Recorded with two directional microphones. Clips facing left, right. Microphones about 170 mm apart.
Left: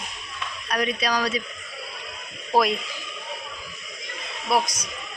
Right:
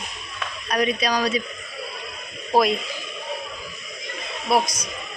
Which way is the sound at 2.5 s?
25° right (ahead or behind).